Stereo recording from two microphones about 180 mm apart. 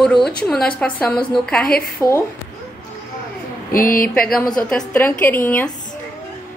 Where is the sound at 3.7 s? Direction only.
50° left (ahead or behind).